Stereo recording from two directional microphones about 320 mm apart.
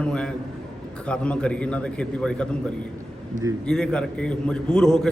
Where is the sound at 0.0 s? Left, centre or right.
Centre.